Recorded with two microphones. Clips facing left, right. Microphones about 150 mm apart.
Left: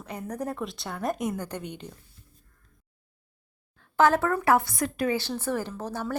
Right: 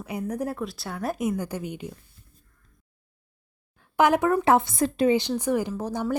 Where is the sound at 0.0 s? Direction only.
10° right (ahead or behind).